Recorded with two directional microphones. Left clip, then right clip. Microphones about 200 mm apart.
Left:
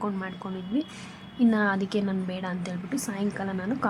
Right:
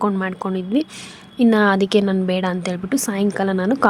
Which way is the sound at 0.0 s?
45° right (ahead or behind).